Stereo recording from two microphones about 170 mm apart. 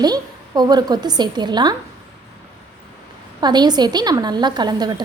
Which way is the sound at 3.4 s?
25° right (ahead or behind).